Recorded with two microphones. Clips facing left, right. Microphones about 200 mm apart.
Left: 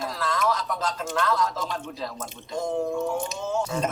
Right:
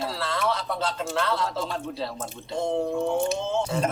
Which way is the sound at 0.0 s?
30° right (ahead or behind).